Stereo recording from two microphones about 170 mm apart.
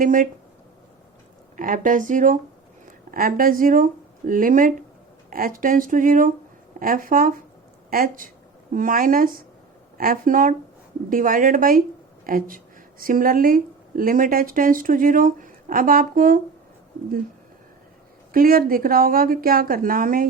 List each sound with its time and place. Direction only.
0.0 s speech: 50° right (ahead or behind)
1.5 s a woman's voice: 55° right (ahead or behind)
18.3 s a woman's voice: 60° right (ahead or behind)